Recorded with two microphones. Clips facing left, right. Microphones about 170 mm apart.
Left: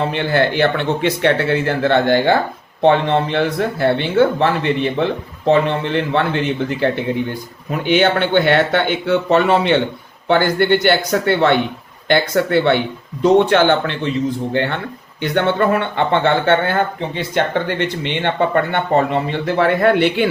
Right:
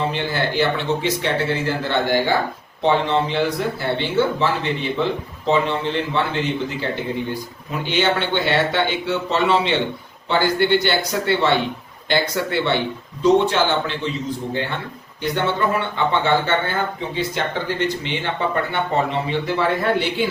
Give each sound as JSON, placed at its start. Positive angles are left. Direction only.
{"t": 0.1, "sound": "speech", "side_deg": 60}